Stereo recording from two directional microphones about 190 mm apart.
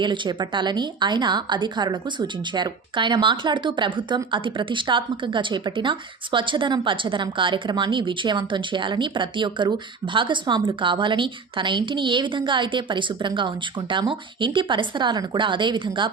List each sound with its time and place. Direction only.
0.0 s a woman's voice: 25° right (ahead or behind)